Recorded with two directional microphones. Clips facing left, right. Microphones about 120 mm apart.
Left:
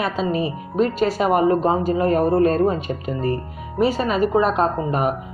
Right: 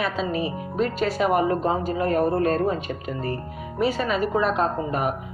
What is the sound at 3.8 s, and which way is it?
Speech, 35° left (ahead or behind).